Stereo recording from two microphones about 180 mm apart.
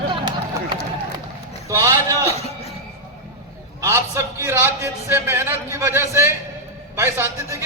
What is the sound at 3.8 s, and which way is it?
A man's voice, 15° right (ahead or behind).